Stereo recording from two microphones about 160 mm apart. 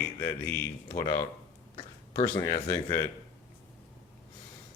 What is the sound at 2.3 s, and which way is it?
Speech, 20° left (ahead or behind).